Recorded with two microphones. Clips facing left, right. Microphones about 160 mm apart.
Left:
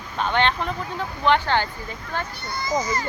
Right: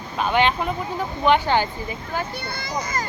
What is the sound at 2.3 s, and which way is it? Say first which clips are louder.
Speech: left 3 dB; 60° right (ahead or behind).